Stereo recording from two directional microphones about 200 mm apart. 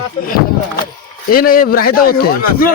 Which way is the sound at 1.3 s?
45° left (ahead or behind).